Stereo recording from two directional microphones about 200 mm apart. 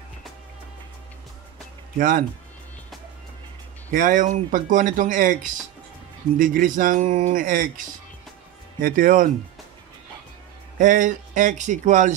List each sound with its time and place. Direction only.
2.0 s speech: 45° right (ahead or behind)
3.9 s speech: 40° right (ahead or behind)
8.8 s speech: 45° right (ahead or behind)
10.8 s speech: 40° right (ahead or behind)